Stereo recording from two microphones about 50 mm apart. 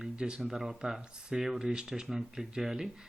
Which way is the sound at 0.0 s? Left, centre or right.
Centre.